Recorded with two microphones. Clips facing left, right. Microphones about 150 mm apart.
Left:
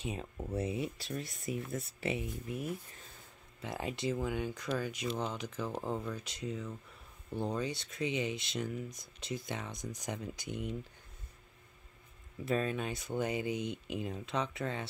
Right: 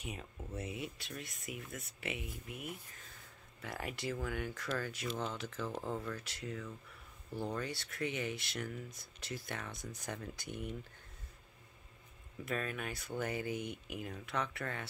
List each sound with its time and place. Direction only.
0.0 s speech: 30° left (ahead or behind)
3.6 s speech: 20° left (ahead or behind)
12.4 s speech: 25° left (ahead or behind)